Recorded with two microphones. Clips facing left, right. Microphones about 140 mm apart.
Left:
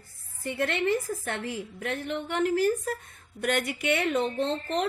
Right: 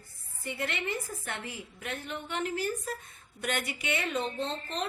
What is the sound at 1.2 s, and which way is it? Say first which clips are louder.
A woman's voice: left 7 dB; 65° left (ahead or behind).